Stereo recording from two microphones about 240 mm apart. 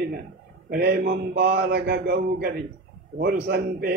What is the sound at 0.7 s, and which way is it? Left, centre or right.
Speech, right.